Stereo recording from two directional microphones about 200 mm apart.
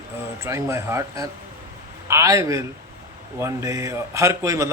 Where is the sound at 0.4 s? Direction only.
15° right (ahead or behind).